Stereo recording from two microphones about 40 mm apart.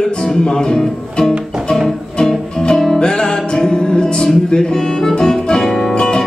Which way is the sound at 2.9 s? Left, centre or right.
Centre.